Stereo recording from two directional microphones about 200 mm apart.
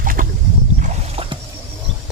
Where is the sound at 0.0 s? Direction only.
45° right (ahead or behind).